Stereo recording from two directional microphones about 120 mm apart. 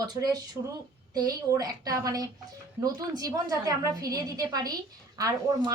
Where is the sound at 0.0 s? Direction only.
35° right (ahead or behind).